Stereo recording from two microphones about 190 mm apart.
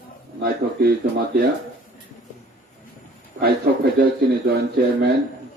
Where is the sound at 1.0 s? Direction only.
55° right (ahead or behind).